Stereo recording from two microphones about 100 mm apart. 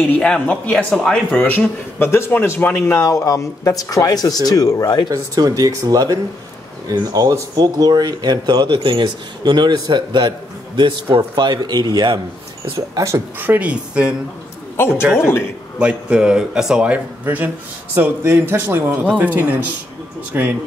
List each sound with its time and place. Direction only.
0.0 s speech: 10° left (ahead or behind)
2.0 s a man's voice: 25° left (ahead or behind)
3.0 s speech: 35° left (ahead or behind)
5.1 s speech: 40° right (ahead or behind)
12.9 s speech: 30° right (ahead or behind)
13.4 s speech: 15° right (ahead or behind)
15.1 s a man's voice: 25° left (ahead or behind)
15.8 s speech: 10° right (ahead or behind)